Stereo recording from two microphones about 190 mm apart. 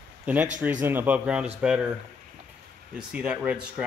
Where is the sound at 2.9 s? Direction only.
5° right (ahead or behind).